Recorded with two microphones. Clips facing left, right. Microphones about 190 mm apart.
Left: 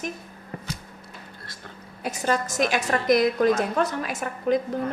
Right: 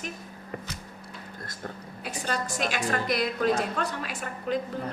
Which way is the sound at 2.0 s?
45° left (ahead or behind).